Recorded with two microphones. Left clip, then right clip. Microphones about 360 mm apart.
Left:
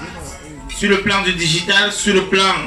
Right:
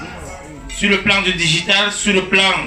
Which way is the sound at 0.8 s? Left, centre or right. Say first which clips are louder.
Right 1 dB; centre.